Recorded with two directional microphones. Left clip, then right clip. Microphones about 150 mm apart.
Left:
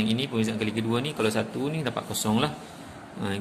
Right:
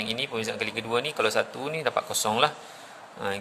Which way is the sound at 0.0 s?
35° right (ahead or behind).